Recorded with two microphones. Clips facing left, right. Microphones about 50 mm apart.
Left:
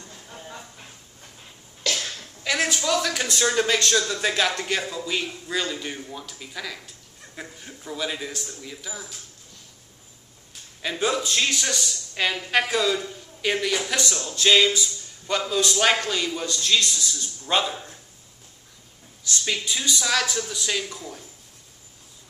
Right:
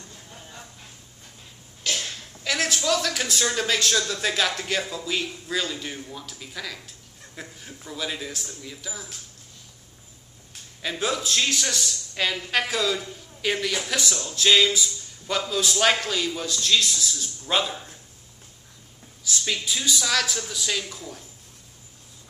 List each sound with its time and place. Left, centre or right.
0.0 s a sound: left
2.4 s speech: centre
10.8 s speech: centre
19.2 s speech: centre